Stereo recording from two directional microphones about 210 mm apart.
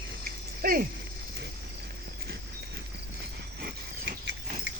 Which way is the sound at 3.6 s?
50° right (ahead or behind).